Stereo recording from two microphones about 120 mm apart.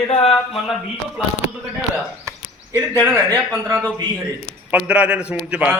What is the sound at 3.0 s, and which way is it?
Speech, 20° right (ahead or behind).